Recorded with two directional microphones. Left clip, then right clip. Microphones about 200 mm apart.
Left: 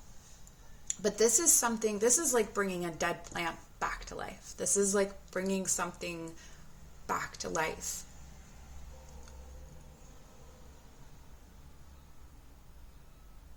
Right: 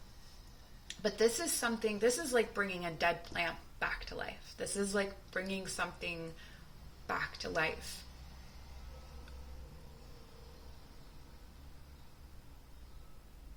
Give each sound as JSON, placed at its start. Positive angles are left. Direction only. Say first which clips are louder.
{"t": 1.0, "sound": "a woman's voice", "louder": "left 4 dB", "side_deg": 50}